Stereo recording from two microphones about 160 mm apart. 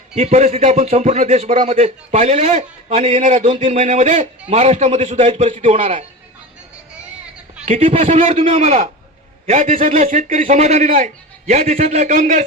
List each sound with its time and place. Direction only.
0.2 s a man's voice: 40° right (ahead or behind)
7.6 s a man's voice: 45° right (ahead or behind)
9.9 s a man's voice: 45° right (ahead or behind)